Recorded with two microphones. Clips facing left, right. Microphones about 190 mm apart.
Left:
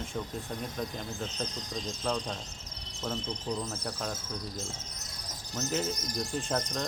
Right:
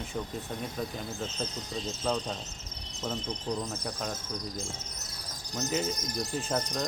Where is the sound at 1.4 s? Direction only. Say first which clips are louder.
Right 1 dB; 15° left (ahead or behind).